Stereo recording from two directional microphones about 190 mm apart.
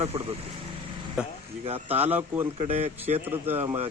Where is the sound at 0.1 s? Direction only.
30° right (ahead or behind).